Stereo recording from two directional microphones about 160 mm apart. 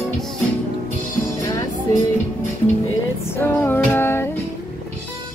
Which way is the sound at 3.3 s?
15° left (ahead or behind).